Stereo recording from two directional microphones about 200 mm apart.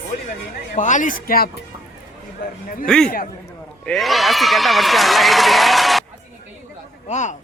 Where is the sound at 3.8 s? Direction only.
Centre (ahead or behind).